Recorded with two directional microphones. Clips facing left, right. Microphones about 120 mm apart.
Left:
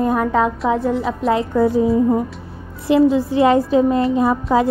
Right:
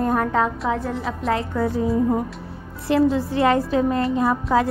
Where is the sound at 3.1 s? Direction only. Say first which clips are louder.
Left 4 dB; 15° left (ahead or behind).